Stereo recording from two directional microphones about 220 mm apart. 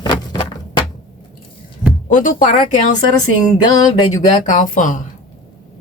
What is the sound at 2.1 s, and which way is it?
Speech, 35° left (ahead or behind).